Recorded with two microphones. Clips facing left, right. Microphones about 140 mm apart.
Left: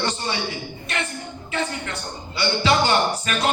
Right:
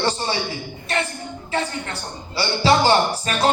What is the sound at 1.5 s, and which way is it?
A man's voice, 35° right (ahead or behind).